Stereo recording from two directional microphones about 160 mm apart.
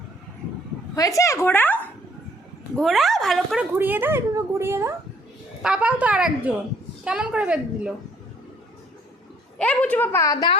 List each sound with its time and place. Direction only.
0.9 s a woman's voice: 20° left (ahead or behind)
2.7 s a woman's voice: centre (ahead or behind)
3.8 s a woman's voice: 10° right (ahead or behind)
9.6 s a woman's voice: 10° left (ahead or behind)